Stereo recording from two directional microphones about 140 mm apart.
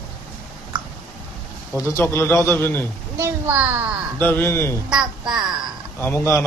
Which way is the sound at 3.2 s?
15° right (ahead or behind).